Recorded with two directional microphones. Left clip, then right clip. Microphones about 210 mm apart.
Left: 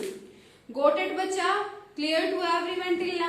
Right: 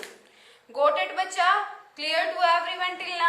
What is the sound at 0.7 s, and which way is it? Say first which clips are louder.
A woman's voice: right 1 dB; 45° right (ahead or behind).